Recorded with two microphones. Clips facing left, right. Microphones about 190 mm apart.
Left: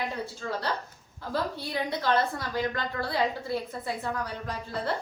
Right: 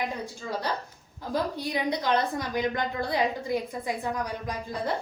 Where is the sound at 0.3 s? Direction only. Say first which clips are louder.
Right 1 dB; 15° right (ahead or behind).